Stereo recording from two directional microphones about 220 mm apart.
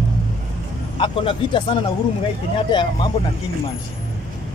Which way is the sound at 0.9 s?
25° left (ahead or behind).